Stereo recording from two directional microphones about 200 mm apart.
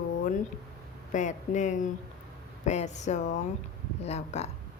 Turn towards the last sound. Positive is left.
turn(degrees=35)  # may be behind; listen again after turning